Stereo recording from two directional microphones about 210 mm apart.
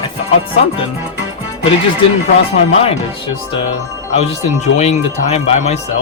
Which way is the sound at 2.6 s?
30° left (ahead or behind).